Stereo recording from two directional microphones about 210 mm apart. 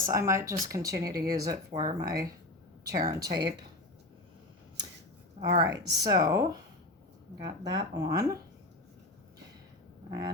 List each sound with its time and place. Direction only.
0.0 s speech: 15° right (ahead or behind)
5.5 s speech: 15° right (ahead or behind)
10.1 s a sound: 15° right (ahead or behind)